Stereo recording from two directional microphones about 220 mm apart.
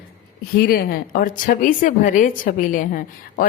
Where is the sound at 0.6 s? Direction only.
40° left (ahead or behind).